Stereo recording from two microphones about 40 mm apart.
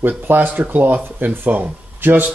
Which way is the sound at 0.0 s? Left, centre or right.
Right.